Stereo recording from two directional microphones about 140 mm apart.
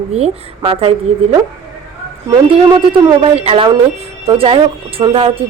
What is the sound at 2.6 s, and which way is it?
A woman's voice, 35° right (ahead or behind).